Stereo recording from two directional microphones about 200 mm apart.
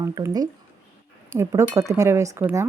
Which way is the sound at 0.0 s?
15° right (ahead or behind).